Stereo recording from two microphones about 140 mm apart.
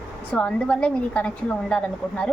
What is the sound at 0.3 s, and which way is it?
A woman's voice, 10° left (ahead or behind).